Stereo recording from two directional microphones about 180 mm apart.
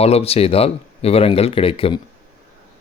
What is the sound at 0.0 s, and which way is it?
Speech, 35° left (ahead or behind).